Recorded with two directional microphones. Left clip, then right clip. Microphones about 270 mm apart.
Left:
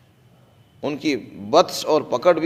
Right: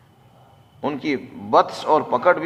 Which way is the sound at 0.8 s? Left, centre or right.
Left.